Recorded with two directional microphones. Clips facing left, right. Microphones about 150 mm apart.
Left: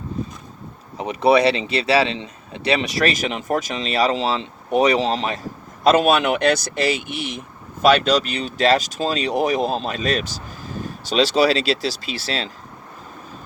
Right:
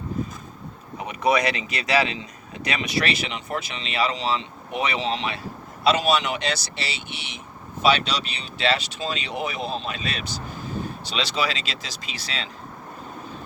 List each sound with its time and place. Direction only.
0.9 s speech: 30° left (ahead or behind)